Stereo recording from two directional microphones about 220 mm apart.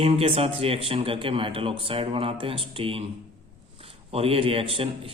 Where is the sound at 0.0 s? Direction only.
25° right (ahead or behind).